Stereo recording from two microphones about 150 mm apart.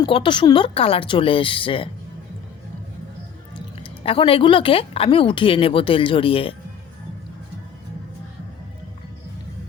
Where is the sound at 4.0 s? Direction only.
35° left (ahead or behind).